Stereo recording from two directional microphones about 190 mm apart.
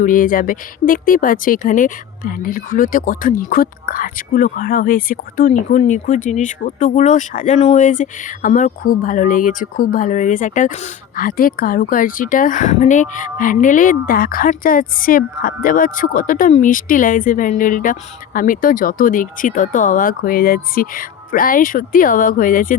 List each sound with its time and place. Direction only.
0.0 s speech: 45° left (ahead or behind)